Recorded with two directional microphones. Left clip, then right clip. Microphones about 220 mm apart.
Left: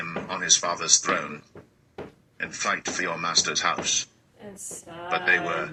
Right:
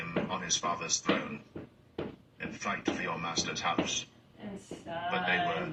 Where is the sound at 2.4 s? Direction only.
55° left (ahead or behind).